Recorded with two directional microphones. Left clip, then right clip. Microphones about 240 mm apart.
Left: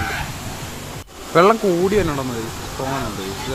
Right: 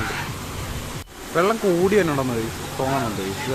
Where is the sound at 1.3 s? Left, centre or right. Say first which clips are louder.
Left 7 dB; centre.